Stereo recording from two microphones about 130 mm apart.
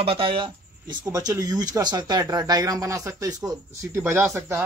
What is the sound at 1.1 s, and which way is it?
Speech, 25° right (ahead or behind).